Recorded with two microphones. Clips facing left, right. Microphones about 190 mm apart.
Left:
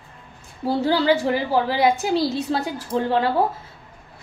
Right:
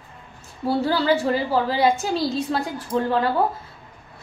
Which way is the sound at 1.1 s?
15° left (ahead or behind).